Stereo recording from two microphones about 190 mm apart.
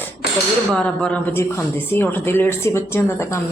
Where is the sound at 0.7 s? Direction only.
5° left (ahead or behind).